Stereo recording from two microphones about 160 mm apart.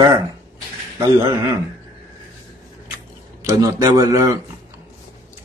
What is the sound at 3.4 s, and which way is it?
Speech, 20° right (ahead or behind).